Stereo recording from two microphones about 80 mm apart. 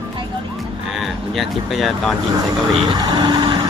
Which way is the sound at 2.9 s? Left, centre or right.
Right.